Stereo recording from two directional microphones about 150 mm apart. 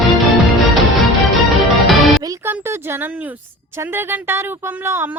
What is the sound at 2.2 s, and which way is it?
Music, 25° right (ahead or behind).